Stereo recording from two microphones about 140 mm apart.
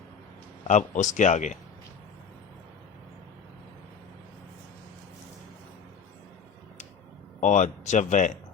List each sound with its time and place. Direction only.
0.7 s speech: 60° left (ahead or behind)
7.4 s speech: 65° left (ahead or behind)